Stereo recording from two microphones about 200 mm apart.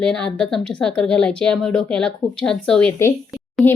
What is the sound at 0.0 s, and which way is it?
A woman's voice, 5° left (ahead or behind).